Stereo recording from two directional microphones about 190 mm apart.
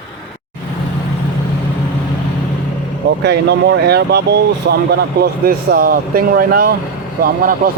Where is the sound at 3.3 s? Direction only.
60° right (ahead or behind).